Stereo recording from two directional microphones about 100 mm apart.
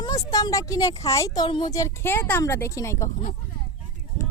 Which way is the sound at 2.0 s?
25° left (ahead or behind).